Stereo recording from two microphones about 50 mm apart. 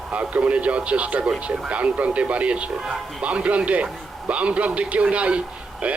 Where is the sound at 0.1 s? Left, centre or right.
Right.